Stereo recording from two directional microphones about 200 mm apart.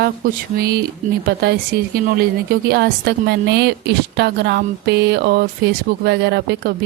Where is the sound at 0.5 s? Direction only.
50° right (ahead or behind).